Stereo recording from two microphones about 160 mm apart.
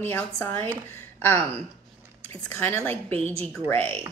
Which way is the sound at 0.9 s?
15° left (ahead or behind).